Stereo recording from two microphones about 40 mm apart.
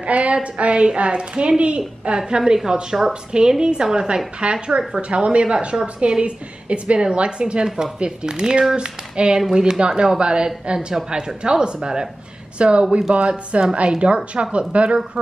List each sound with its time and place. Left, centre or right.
0.0 s a woman's voice: right
7.6 s a woman's voice: centre
12.5 s a woman's voice: right